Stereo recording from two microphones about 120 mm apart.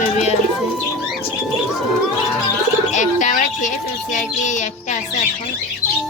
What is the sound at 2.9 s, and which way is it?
Music, 90° left.